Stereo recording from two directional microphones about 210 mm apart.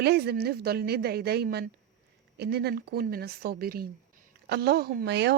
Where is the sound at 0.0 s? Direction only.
50° right (ahead or behind).